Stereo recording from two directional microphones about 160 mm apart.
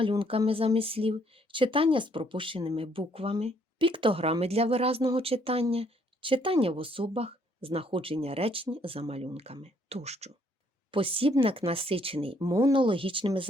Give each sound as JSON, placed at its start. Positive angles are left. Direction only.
{"t": 0.0, "sound": "speech", "side_deg": -35}
{"t": 12.4, "sound": "speech", "side_deg": -20}